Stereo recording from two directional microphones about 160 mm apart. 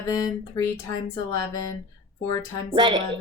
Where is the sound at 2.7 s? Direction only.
30° right (ahead or behind).